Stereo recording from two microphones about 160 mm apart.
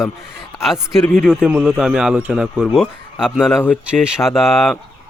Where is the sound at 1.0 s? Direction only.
10° left (ahead or behind).